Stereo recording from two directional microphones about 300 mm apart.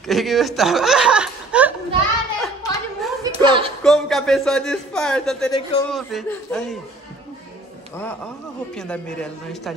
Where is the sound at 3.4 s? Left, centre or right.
Centre.